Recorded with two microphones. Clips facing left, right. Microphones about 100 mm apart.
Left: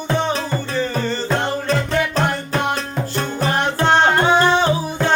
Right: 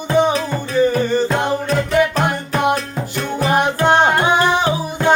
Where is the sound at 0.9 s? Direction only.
15° right (ahead or behind).